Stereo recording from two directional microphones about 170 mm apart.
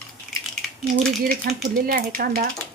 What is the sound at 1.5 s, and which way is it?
Speech, 60° right (ahead or behind).